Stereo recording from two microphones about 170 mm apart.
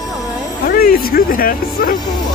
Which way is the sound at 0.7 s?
60° left (ahead or behind).